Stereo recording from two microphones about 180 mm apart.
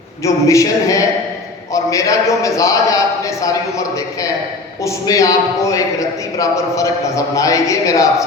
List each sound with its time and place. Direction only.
0.3 s a man's voice: 15° left (ahead or behind)